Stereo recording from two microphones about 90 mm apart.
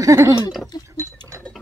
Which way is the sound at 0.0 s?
35° right (ahead or behind).